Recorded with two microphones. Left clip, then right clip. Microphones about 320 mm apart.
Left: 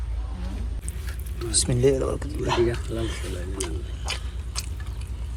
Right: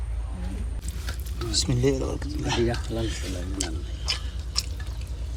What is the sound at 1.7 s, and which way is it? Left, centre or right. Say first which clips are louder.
Speech: left 7 dB; centre.